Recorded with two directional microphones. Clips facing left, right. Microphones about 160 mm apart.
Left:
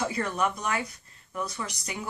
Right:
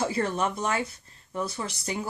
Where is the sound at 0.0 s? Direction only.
30° right (ahead or behind).